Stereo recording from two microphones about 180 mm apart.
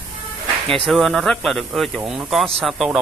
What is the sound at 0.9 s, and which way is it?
Speech, centre (ahead or behind).